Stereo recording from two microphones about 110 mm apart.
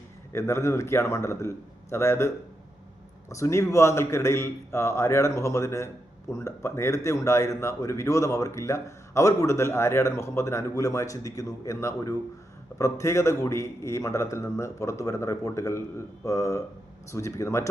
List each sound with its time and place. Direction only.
0.3 s a man's voice: 25° left (ahead or behind)